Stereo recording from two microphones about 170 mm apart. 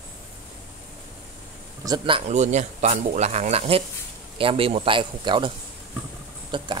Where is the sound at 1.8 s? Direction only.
20° right (ahead or behind).